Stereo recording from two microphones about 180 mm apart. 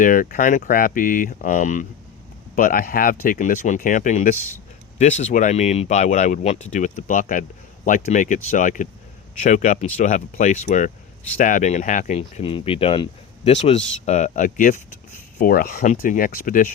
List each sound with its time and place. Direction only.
0.0 s speech: 50° left (ahead or behind)